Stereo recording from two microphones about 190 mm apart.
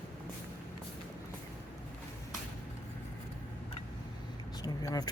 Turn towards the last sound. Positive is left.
turn(degrees=20)  # may be behind; listen again after turning